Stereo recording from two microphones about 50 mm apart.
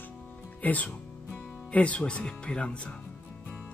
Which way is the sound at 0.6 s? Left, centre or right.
Left.